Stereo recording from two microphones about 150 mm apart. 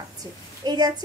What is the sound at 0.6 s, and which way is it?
Speech, 25° right (ahead or behind).